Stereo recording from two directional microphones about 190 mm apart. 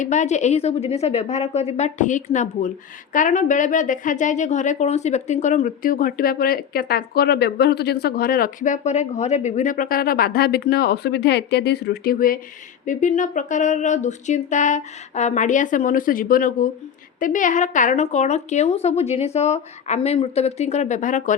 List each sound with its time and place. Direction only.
0.0 s a woman's voice: 40° left (ahead or behind)